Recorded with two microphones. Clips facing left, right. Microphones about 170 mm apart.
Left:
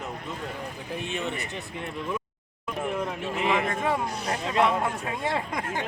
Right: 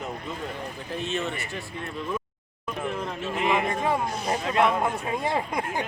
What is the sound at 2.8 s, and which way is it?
Chatter, 10° left (ahead or behind).